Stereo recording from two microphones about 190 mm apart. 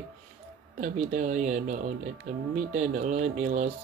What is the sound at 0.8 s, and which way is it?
Speech, 40° right (ahead or behind).